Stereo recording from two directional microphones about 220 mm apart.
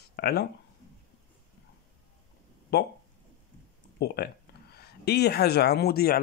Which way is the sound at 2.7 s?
50° left (ahead or behind).